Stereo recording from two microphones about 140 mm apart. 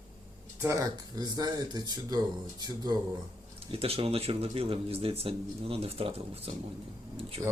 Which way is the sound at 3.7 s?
45° right (ahead or behind).